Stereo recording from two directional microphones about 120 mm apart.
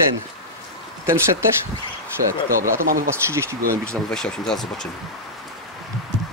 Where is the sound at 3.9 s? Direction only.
5° left (ahead or behind).